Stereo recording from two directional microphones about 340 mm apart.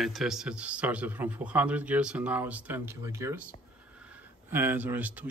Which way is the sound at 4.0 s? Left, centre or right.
Centre.